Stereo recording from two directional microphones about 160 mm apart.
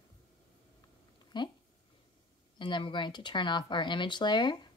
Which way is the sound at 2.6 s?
30° left (ahead or behind).